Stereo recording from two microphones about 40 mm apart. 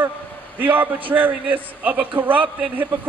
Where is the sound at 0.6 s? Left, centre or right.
Right.